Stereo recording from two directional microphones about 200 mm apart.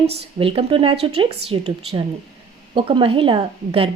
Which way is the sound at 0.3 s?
25° right (ahead or behind).